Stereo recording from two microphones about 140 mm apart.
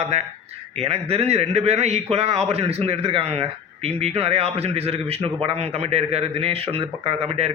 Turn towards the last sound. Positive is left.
turn(degrees=-45)  # may be behind; listen again after turning